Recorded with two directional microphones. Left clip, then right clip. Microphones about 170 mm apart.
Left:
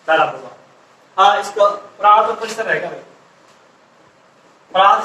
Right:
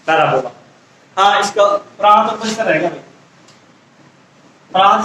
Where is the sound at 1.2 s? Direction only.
20° right (ahead or behind).